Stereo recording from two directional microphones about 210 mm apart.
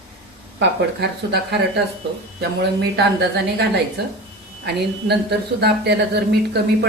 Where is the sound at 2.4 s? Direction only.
50° right (ahead or behind).